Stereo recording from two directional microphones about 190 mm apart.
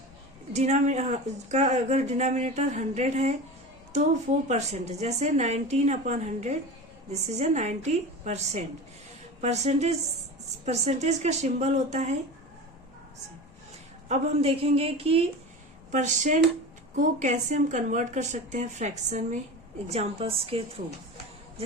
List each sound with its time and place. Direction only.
0.5 s speech: 35° right (ahead or behind)
4.4 s speech: 35° right (ahead or behind)
14.1 s speech: 30° right (ahead or behind)